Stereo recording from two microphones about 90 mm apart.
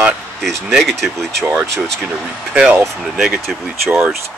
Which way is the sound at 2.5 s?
15° right (ahead or behind).